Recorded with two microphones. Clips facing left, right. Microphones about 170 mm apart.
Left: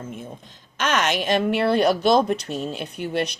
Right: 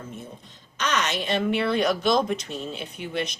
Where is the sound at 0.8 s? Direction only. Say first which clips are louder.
Left 4 dB; 50° left (ahead or behind).